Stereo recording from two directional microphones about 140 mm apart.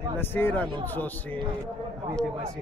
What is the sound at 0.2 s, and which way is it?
A man's voice, 15° left (ahead or behind).